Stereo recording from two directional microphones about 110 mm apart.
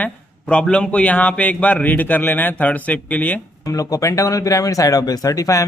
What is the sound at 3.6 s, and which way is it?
Speech, 30° left (ahead or behind).